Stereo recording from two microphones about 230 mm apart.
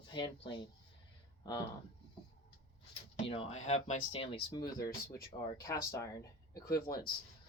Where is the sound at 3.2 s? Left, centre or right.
Left.